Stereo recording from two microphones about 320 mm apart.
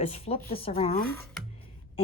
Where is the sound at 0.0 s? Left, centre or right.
Centre.